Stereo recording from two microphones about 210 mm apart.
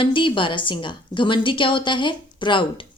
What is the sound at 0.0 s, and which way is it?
A woman's voice, 25° left (ahead or behind).